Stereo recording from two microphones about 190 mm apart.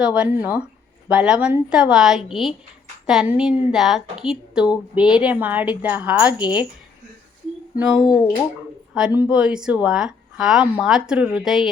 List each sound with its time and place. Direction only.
0.0 s a woman's voice: 5° right (ahead or behind)
7.8 s a woman's voice: 5° right (ahead or behind)
8.0 s speech: 15° left (ahead or behind)
9.0 s a woman's voice: 5° right (ahead or behind)